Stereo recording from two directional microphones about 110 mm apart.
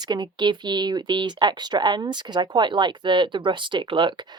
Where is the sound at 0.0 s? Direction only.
40° right (ahead or behind).